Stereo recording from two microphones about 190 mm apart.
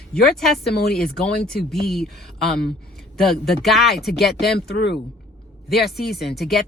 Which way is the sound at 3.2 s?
Centre (ahead or behind).